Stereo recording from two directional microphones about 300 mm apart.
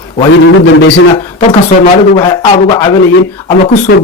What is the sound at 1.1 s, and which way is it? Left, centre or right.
Speech, centre.